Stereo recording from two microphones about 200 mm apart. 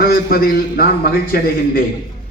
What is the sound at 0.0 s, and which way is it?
A man's voice, 45° left (ahead or behind).